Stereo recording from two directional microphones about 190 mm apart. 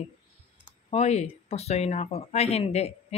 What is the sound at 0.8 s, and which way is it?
A woman's voice, 35° left (ahead or behind).